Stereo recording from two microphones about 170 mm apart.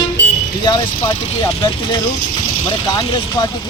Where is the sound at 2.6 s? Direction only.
25° left (ahead or behind).